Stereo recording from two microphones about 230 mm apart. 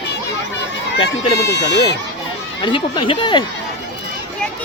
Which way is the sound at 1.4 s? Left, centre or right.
Left.